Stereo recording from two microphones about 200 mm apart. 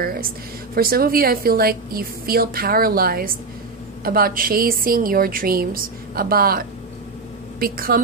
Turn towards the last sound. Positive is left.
turn(degrees=-45)  # may be behind; listen again after turning